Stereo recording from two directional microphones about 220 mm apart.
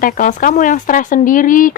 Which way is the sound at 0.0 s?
35° left (ahead or behind).